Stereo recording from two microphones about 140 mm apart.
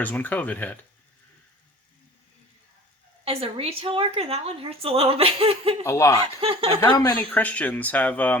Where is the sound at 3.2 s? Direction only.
45° right (ahead or behind).